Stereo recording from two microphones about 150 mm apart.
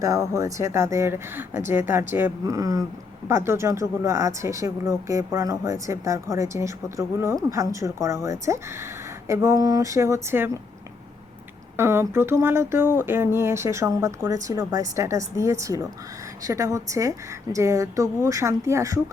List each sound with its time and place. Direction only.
0.0 s speech: 20° right (ahead or behind)
11.8 s speech: 15° right (ahead or behind)